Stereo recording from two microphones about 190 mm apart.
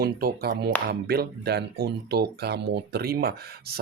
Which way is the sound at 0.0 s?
50° right (ahead or behind).